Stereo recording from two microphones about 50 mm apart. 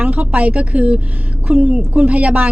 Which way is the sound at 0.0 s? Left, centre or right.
Right.